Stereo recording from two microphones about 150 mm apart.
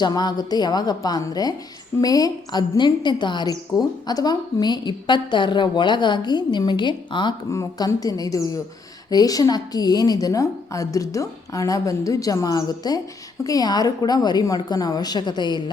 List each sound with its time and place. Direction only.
0.0 s a woman's voice: 30° left (ahead or behind)
7.5 s a woman's voice: 20° left (ahead or behind)